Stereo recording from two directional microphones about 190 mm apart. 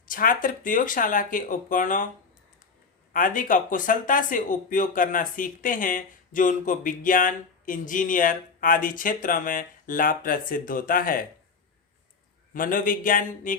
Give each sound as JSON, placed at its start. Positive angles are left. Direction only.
{"t": 0.0, "sound": "speech", "side_deg": 45}
{"t": 3.1, "sound": "speech", "side_deg": 45}
{"t": 12.5, "sound": "speech", "side_deg": 45}